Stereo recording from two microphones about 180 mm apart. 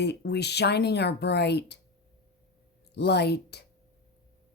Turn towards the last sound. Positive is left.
turn(degrees=65)  # may be behind; listen again after turning